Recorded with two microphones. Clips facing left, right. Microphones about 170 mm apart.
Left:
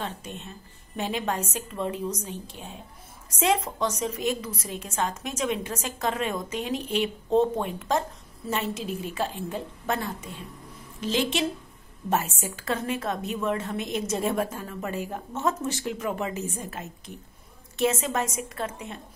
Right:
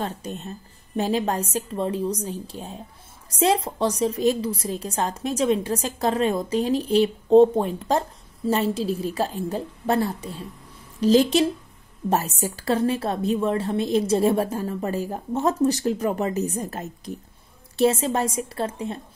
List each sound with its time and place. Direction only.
0.0 s a woman's voice: 40° right (ahead or behind)